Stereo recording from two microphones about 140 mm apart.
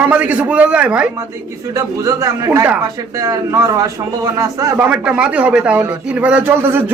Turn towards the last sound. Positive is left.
turn(degrees=-15)  # may be behind; listen again after turning